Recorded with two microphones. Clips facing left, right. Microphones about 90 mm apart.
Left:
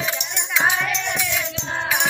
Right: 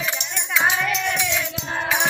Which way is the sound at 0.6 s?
10° left (ahead or behind).